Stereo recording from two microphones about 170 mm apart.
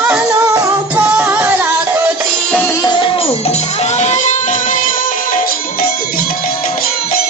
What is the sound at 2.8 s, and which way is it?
Music, 30° left (ahead or behind).